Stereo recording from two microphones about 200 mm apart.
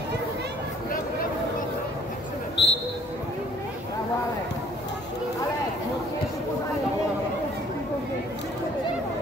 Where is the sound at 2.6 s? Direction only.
60° left (ahead or behind).